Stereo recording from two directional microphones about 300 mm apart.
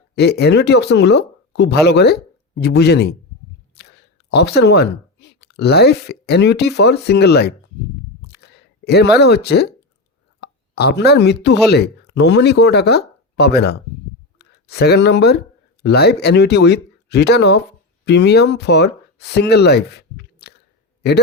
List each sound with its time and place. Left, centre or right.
0.2 s speech: left
8.3 s a sound: left
10.4 s speech: left